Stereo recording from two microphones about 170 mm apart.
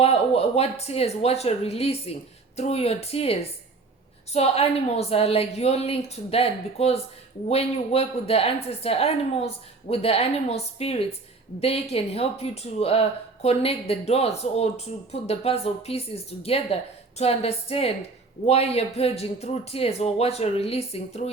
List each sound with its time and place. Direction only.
0.0 s speech: 35° left (ahead or behind)